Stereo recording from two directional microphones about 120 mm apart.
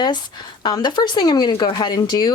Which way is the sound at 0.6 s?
40° left (ahead or behind).